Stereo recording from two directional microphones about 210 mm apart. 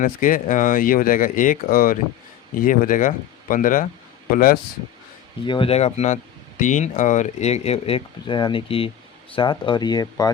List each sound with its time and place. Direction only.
0.0 s speech: 40° left (ahead or behind)
5.5 s speech: 25° left (ahead or behind)